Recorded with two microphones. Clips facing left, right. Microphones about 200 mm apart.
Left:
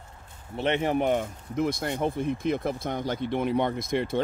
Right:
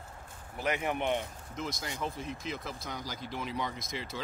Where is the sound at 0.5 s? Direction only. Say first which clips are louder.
Left 7 dB; 30° left (ahead or behind).